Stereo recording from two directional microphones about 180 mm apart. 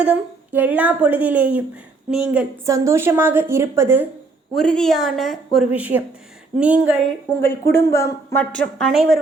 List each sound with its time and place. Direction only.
0.0 s a woman's voice: 10° right (ahead or behind)
2.6 s a woman's voice: 15° right (ahead or behind)
4.5 s a woman's voice: 5° left (ahead or behind)
7.4 s a woman's voice: 15° left (ahead or behind); by 9.1 s centre (ahead or behind)